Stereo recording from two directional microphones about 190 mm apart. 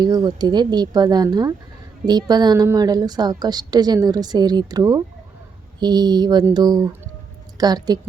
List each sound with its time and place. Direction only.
0.0 s a woman's voice: 20° right (ahead or behind)